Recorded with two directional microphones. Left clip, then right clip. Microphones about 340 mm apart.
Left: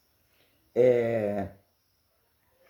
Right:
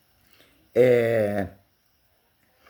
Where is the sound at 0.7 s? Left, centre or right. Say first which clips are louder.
Right 4 dB; right.